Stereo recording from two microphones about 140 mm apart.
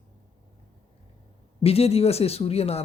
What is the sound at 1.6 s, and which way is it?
Speech, 45° left (ahead or behind).